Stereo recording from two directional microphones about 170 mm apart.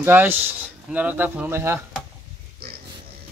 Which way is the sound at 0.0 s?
10° right (ahead or behind).